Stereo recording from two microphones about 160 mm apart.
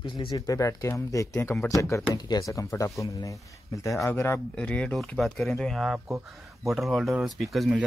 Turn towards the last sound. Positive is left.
turn(degrees=0)  # may be behind; listen again after turning